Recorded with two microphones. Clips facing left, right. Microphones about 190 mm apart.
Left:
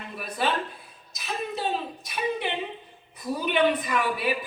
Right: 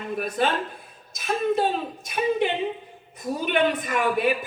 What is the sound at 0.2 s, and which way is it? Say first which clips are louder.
Speech: right 3 dB; 50° right (ahead or behind).